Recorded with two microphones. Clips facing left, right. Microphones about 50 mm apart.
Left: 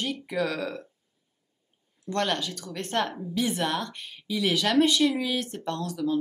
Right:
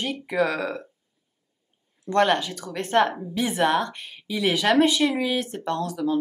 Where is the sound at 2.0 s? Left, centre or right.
Centre.